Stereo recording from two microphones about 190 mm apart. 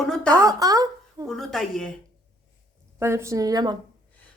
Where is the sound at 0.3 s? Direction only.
20° right (ahead or behind).